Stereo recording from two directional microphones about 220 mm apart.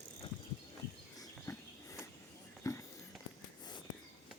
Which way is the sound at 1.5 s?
15° left (ahead or behind).